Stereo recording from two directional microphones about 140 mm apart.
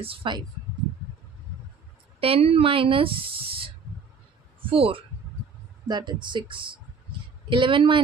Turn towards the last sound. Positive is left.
turn(degrees=-35)  # may be behind; listen again after turning